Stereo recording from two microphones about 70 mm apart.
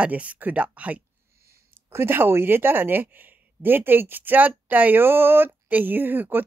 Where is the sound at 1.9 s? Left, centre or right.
Right.